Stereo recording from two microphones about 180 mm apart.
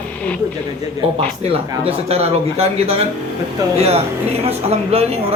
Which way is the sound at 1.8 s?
35° right (ahead or behind).